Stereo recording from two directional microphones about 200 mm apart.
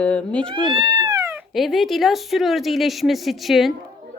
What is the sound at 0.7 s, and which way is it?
Speech, 25° right (ahead or behind).